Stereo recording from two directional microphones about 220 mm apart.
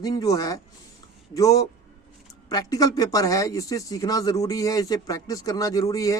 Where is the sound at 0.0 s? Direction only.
15° left (ahead or behind).